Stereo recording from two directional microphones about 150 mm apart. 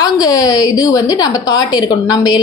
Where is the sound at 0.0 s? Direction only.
25° left (ahead or behind).